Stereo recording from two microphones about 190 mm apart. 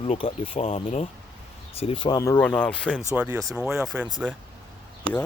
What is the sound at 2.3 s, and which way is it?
Speech, 5° left (ahead or behind).